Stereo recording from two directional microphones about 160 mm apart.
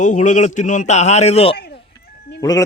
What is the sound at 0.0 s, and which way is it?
A man's voice, 50° left (ahead or behind).